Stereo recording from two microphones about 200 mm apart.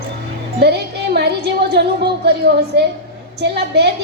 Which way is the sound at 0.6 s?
55° right (ahead or behind).